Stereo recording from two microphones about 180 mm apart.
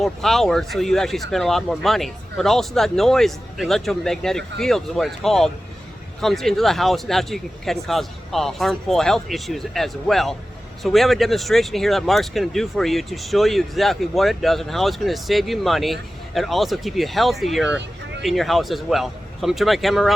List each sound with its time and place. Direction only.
0.0 s speech: centre (ahead or behind)